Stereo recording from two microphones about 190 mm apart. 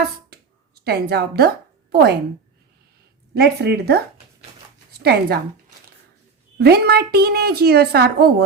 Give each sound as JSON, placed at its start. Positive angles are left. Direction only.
{"t": 0.9, "sound": "a woman's voice", "side_deg": -55}
{"t": 3.3, "sound": "a woman's voice", "side_deg": -60}
{"t": 6.6, "sound": "a woman's voice", "side_deg": -55}